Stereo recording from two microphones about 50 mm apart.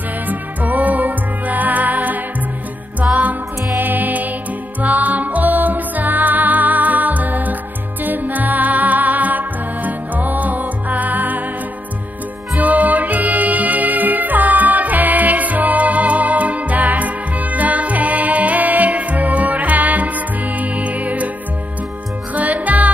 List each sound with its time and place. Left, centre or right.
0.3 s music: right
12.5 s music: right
22.3 s music: right